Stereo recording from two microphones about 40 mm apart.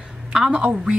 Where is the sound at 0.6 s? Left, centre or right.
Right.